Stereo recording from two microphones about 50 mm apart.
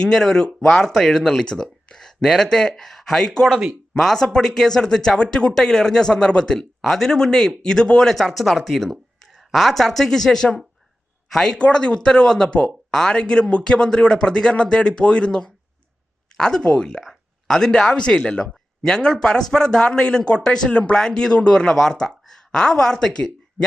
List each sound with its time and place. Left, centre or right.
0.0 s speech: centre
8.1 s speech: centre
11.5 s speech: centre